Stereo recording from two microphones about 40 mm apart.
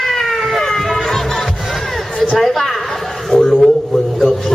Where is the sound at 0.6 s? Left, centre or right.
Centre.